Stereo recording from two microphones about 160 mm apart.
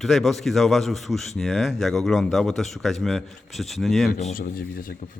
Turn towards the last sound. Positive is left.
turn(degrees=65)  # may be behind; listen again after turning